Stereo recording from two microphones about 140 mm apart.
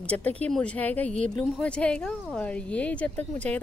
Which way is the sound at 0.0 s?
10° left (ahead or behind).